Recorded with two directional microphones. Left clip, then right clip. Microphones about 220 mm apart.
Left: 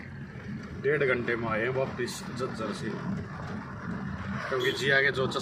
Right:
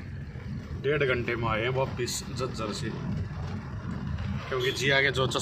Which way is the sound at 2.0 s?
20° right (ahead or behind).